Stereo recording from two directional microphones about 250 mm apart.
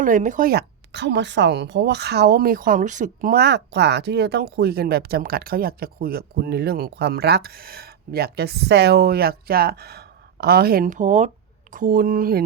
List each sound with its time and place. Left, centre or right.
0.0 s a woman's voice: right